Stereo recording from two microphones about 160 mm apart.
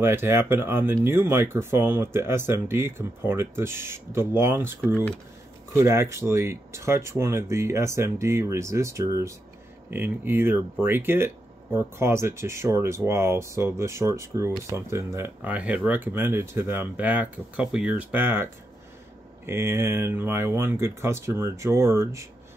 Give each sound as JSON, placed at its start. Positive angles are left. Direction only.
{"t": 0.0, "sound": "speech", "side_deg": -15}